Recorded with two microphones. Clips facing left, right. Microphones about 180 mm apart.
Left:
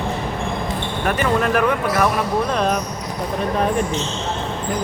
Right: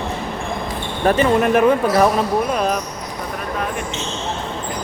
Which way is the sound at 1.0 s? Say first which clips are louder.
Right 5 dB; 25° right (ahead or behind).